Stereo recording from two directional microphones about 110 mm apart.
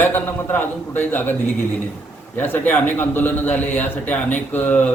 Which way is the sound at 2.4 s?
15° left (ahead or behind).